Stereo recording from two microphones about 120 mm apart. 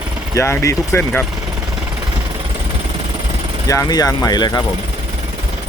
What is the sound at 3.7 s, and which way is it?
Speech, 30° left (ahead or behind).